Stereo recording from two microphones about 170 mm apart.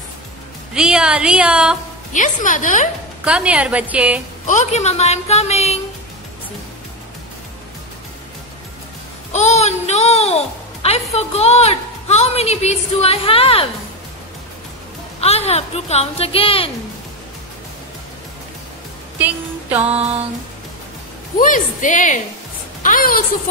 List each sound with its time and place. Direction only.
0.7 s speech: 5° right (ahead or behind)
2.1 s a woman's voice: 50° left (ahead or behind)
3.3 s a woman's voice: 5° right (ahead or behind)
4.5 s a woman's voice: 45° left (ahead or behind)
9.3 s music: 40° left (ahead or behind)
11.1 s a woman's voice: 40° left (ahead or behind)
15.1 s a woman's voice: 40° left (ahead or behind)
19.1 s music: 10° right (ahead or behind)
21.4 s a woman's voice: 50° left (ahead or behind)